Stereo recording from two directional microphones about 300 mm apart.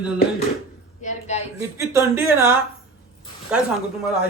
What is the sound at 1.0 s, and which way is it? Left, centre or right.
Speech, left.